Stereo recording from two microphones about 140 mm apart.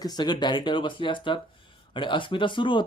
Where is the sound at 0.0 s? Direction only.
30° left (ahead or behind).